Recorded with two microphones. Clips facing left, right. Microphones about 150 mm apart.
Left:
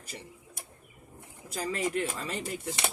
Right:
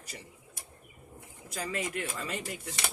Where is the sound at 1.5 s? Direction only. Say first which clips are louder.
Left 4 dB; 35° left (ahead or behind).